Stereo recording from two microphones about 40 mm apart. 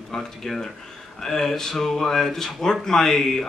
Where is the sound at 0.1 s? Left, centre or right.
Centre.